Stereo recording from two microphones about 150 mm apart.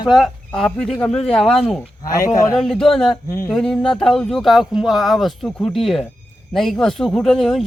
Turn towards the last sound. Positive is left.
turn(degrees=0)  # may be behind; listen again after turning